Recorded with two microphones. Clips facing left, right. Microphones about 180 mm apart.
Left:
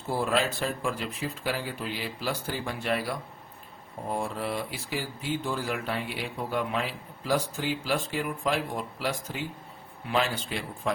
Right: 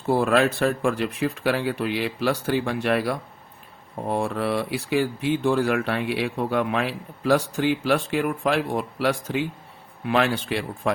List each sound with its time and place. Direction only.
0.1 s speech: 70° right (ahead or behind)